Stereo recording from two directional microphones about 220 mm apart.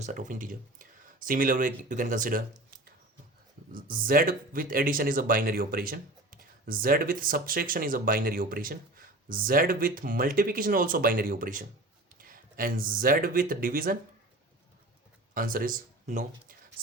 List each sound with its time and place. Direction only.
0.0 s speech: 35° right (ahead or behind)
15.4 s speech: 40° right (ahead or behind)